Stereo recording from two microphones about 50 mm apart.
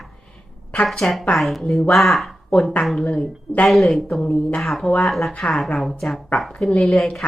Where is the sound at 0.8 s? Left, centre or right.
Centre.